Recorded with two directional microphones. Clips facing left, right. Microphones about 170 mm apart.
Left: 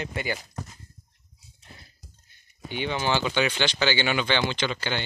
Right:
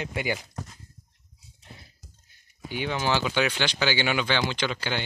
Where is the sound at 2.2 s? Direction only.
5° right (ahead or behind).